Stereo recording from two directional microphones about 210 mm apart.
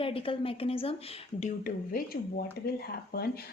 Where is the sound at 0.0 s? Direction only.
25° left (ahead or behind).